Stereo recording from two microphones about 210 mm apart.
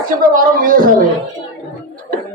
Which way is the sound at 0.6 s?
40° right (ahead or behind).